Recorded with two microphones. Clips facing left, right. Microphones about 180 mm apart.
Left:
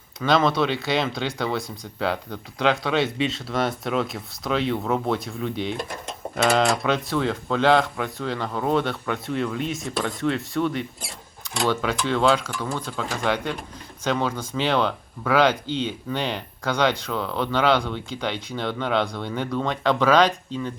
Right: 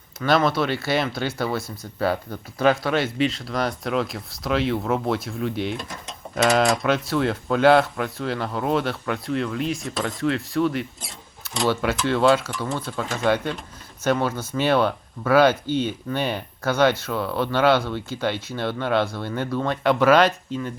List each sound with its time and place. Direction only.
0.3 s speech: 5° right (ahead or behind)
5.7 s speech: 60° left (ahead or behind)
6.3 s speech: centre (ahead or behind)